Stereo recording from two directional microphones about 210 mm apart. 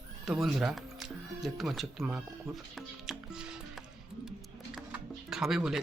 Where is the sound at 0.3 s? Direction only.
Centre (ahead or behind).